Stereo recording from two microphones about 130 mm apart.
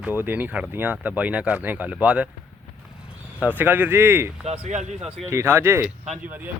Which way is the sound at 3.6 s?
15° right (ahead or behind).